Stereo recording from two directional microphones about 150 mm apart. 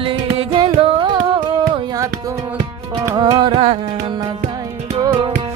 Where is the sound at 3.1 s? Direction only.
30° right (ahead or behind).